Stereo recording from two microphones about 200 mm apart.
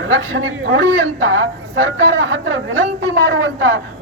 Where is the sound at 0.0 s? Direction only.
70° right (ahead or behind).